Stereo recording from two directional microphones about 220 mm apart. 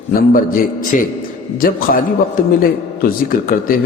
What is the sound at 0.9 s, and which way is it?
A man's voice, 35° left (ahead or behind).